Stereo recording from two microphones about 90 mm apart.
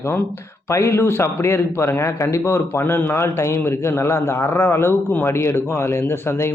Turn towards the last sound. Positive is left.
turn(degrees=30)  # may be behind; listen again after turning